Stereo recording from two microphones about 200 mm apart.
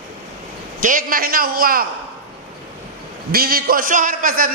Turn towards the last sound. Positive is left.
turn(degrees=-40)  # may be behind; listen again after turning